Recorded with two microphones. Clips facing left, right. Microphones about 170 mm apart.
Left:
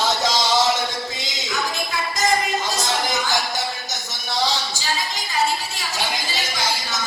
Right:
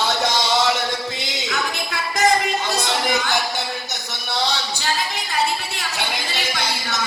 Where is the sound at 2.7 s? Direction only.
60° right (ahead or behind).